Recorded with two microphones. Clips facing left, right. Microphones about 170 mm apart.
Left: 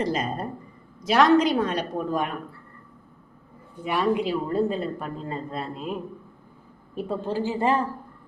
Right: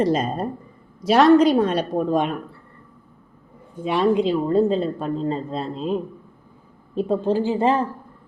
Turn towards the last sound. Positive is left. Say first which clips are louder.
# right 5 dB
turn(degrees=-20)  # may be behind; listen again after turning